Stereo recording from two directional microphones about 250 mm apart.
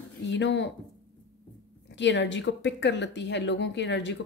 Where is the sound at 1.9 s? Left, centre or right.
Left.